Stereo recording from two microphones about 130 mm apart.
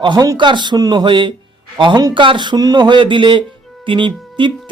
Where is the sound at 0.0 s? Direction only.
35° right (ahead or behind).